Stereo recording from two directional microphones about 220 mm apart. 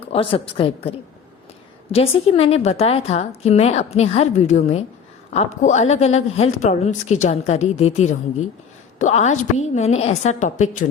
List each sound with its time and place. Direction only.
0.1 s a woman's voice: 25° left (ahead or behind)